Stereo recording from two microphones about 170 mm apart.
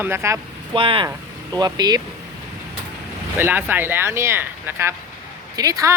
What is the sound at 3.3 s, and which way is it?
Speech, 10° right (ahead or behind).